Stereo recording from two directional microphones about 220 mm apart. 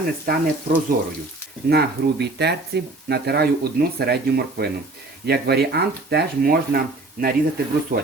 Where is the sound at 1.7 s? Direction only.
50° right (ahead or behind).